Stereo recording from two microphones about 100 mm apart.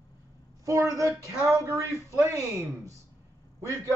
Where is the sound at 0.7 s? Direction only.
35° right (ahead or behind).